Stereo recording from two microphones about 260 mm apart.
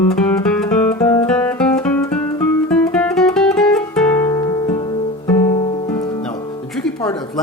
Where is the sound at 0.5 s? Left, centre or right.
Centre.